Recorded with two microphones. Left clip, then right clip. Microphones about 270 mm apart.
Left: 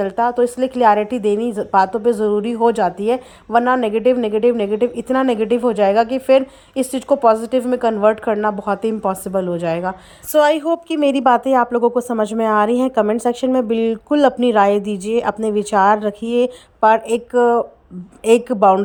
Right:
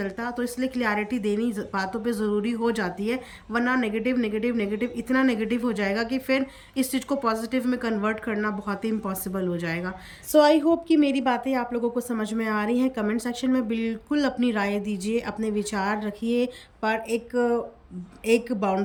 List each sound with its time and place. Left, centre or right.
0.0 s a woman's voice: centre
10.3 s speech: centre
17.3 s speech: left
18.3 s speech: centre